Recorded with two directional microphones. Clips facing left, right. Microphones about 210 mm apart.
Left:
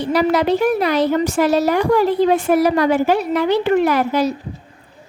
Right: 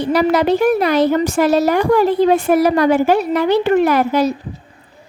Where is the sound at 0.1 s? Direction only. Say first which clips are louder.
Right 1 dB; 45° right (ahead or behind).